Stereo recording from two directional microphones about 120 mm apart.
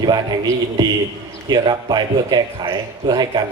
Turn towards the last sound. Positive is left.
turn(degrees=-40)  # may be behind; listen again after turning